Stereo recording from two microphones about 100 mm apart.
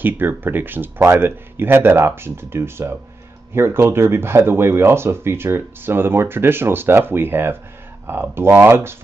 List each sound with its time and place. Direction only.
0.0 s speech: 20° right (ahead or behind)